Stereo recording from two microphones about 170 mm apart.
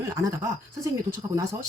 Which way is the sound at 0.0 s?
20° right (ahead or behind).